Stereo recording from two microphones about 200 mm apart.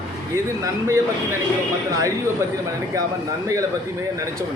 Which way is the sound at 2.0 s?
15° right (ahead or behind).